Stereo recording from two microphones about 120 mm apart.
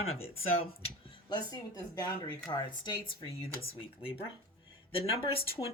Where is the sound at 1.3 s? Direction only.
35° left (ahead or behind).